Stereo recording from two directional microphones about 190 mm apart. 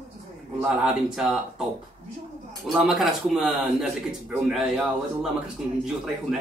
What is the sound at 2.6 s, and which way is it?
Speech, centre (ahead or behind).